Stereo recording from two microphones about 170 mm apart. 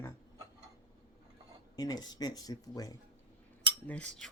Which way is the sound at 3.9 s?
10° left (ahead or behind).